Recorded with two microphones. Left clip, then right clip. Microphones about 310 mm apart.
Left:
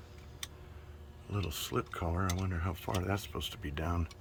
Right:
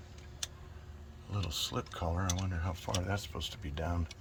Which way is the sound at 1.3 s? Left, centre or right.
Centre.